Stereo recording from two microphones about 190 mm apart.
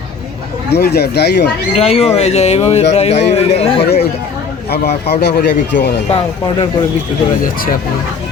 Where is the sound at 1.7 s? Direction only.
35° left (ahead or behind).